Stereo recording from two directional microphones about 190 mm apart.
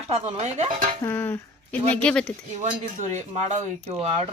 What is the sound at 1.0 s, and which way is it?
Speech, 10° left (ahead or behind).